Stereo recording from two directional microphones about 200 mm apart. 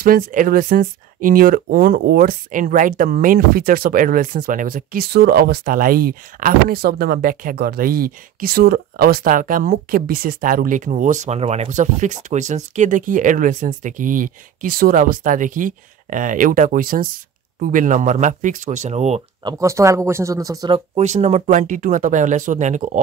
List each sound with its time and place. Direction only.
0.0 s speech: 45° right (ahead or behind)
19.4 s speech: 15° right (ahead or behind)
20.9 s speech: 35° right (ahead or behind)